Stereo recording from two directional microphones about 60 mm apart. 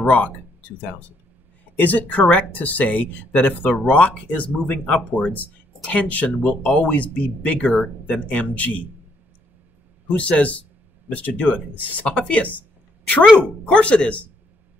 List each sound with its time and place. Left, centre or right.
0.0 s speech: left
10.0 s speech: left